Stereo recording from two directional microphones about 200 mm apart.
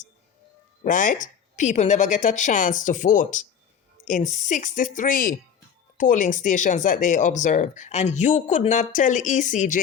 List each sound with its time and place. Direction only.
0.9 s speech: 40° left (ahead or behind)